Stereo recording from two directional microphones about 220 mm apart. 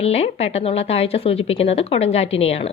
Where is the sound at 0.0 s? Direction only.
30° left (ahead or behind).